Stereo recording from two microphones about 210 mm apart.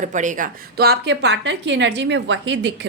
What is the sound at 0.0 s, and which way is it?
Speech, 35° right (ahead or behind).